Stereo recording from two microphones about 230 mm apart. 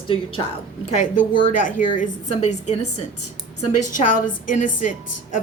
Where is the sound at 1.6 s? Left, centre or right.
Left.